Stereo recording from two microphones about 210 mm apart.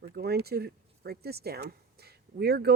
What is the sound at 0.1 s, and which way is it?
Speech, 50° right (ahead or behind).